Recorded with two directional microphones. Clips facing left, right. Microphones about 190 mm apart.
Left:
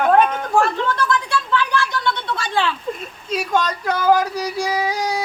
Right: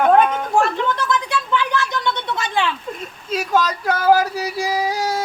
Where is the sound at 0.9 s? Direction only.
20° right (ahead or behind).